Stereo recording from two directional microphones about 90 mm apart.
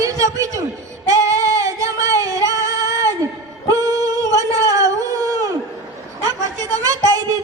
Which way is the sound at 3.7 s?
40° right (ahead or behind).